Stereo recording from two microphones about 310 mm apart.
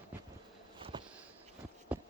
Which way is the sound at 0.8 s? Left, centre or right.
Centre.